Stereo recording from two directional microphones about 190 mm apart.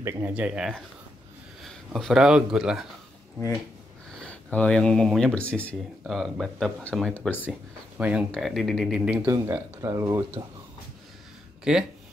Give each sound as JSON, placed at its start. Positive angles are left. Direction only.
{"t": 0.0, "sound": "speech", "side_deg": -10}
{"t": 4.2, "sound": "speech", "side_deg": 5}
{"t": 8.0, "sound": "speech", "side_deg": -5}
{"t": 9.2, "sound": "speech", "side_deg": -15}
{"t": 11.7, "sound": "speech", "side_deg": -5}